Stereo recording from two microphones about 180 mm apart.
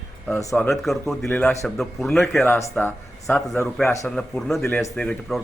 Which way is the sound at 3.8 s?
15° left (ahead or behind).